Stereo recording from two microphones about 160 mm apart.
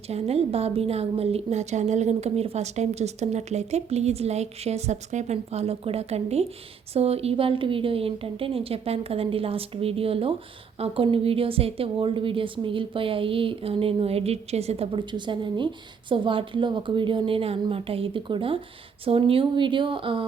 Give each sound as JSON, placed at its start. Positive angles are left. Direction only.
{"t": 0.1, "sound": "a woman's voice", "side_deg": -40}